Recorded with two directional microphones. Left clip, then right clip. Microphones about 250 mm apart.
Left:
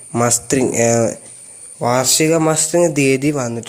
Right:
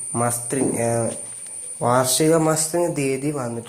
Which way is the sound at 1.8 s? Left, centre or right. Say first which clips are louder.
Left 3 dB; left.